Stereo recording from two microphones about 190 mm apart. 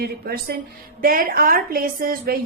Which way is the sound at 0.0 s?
55° right (ahead or behind).